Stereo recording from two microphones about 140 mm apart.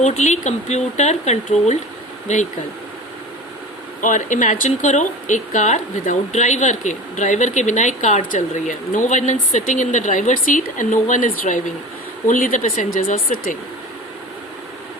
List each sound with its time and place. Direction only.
0.0 s speech: 55° left (ahead or behind)
4.0 s speech: 65° left (ahead or behind); by 13.6 s 80° left